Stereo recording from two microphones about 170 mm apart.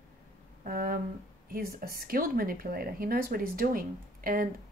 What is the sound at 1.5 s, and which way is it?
A woman's voice, 60° right (ahead or behind).